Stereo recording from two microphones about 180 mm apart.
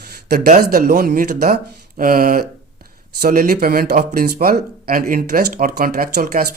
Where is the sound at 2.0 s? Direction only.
55° right (ahead or behind).